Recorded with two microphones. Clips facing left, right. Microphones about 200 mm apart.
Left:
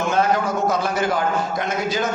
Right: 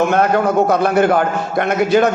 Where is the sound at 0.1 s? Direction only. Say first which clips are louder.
Right 5 dB; 60° right (ahead or behind).